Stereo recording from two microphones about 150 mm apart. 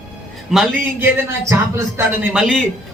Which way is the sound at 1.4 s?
20° right (ahead or behind).